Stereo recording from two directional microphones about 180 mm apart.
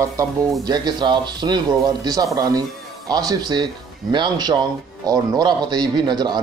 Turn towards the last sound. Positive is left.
turn(degrees=-25)  # may be behind; listen again after turning